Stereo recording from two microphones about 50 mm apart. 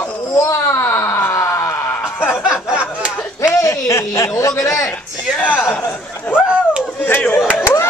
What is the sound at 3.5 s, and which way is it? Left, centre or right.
A man's voice, left.